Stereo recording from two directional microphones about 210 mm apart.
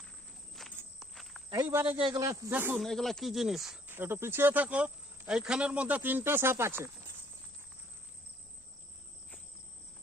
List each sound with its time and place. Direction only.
0.8 s walk: centre (ahead or behind)
1.5 s speech: 20° right (ahead or behind)
2.0 s speech: 20° right (ahead or behind)